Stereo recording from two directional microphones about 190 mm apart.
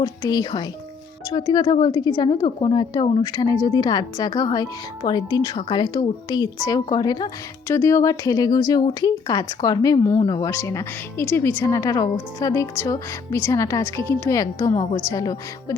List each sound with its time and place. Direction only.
0.0 s speech: 20° left (ahead or behind)